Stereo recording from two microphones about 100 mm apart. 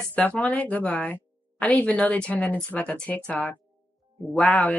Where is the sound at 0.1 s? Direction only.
15° left (ahead or behind).